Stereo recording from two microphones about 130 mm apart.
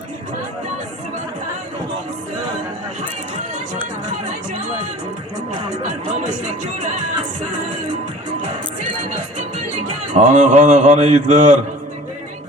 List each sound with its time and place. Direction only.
10.2 s speech: 70° right (ahead or behind)